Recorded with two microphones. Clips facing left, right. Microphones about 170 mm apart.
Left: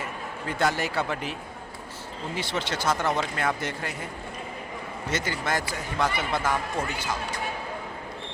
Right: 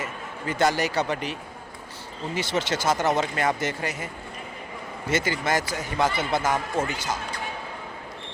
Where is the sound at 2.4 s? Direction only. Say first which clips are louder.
Right 4 dB; centre (ahead or behind).